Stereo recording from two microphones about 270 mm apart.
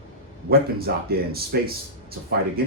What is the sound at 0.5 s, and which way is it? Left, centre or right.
Speech, right.